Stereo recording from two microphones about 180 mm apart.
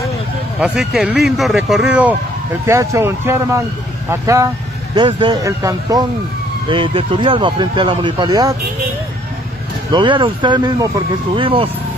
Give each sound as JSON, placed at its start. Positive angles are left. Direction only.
{"t": 0.6, "sound": "speech", "side_deg": 0}
{"t": 9.9, "sound": "speech", "side_deg": -25}